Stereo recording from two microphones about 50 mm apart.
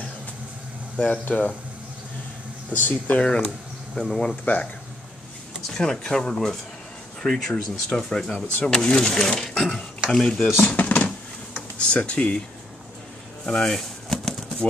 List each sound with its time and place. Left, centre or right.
0.9 s speech: left
2.7 s speech: left
3.2 s speech: left
3.9 s speech: centre
5.8 s speech: centre
10.7 s a sound: left
11.9 s speech: left
13.5 s speech: centre
14.1 s bird flight: centre